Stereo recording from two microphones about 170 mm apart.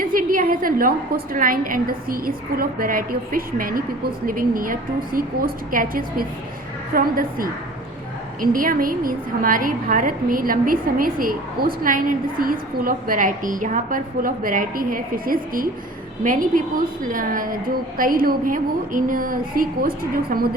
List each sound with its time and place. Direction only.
0.0 s a woman's voice: 55° right (ahead or behind)